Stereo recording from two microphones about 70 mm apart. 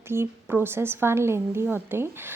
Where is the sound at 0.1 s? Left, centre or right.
Right.